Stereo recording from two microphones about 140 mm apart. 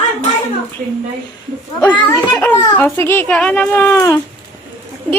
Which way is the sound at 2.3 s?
10° left (ahead or behind).